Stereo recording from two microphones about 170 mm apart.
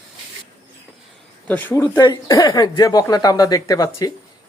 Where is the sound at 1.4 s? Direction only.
10° left (ahead or behind).